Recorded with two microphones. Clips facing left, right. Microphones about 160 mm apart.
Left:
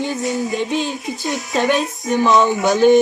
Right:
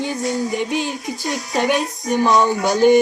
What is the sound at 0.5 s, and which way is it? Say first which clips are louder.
Music: left 1 dB; 15° right (ahead or behind).